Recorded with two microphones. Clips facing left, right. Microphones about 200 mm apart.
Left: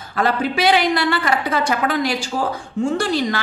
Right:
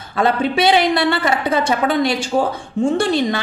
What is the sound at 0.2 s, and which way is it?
A woman's voice, 25° right (ahead or behind).